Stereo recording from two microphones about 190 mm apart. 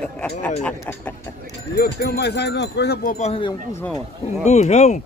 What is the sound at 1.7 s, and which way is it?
Speech, 55° left (ahead or behind).